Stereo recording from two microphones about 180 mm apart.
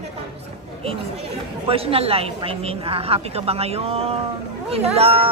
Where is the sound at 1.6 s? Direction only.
30° right (ahead or behind).